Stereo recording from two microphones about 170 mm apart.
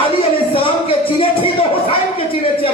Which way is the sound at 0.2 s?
35° left (ahead or behind).